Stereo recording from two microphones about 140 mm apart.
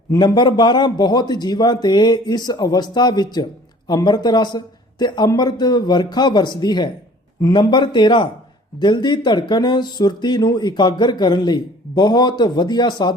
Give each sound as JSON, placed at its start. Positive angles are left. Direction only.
{"t": 0.1, "sound": "a man's voice", "side_deg": 30}